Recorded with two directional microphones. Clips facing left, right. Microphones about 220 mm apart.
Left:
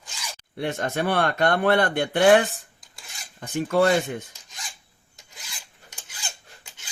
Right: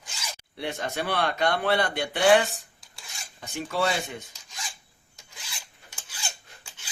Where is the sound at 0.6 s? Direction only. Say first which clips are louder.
Left 5 dB; 50° left (ahead or behind).